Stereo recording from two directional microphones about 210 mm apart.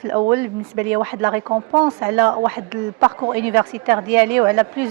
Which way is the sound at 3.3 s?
10° right (ahead or behind).